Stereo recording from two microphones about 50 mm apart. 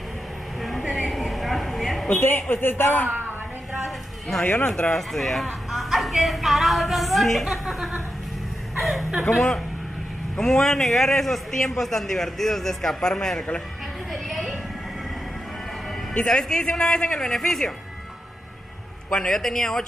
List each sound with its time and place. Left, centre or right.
0.6 s a sound: centre
2.0 s a man's voice: left
4.3 s speech: centre
10.3 s a man's voice: centre
14.1 s music: centre
16.3 s a man's voice: centre
19.0 s a man's voice: centre